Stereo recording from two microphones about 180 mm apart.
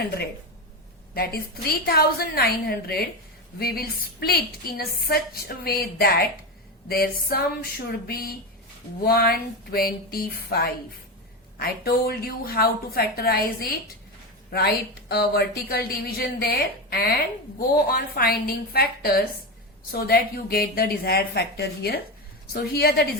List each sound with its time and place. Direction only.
1.1 s a woman's voice: 60° left (ahead or behind)
15.1 s a woman's voice: 60° left (ahead or behind)